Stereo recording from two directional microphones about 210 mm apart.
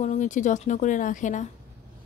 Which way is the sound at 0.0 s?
35° left (ahead or behind).